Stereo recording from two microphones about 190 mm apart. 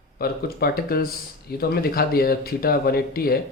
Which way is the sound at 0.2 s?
55° left (ahead or behind).